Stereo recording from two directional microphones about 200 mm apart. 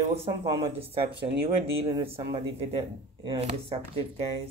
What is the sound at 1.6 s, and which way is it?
Speech, 30° right (ahead or behind).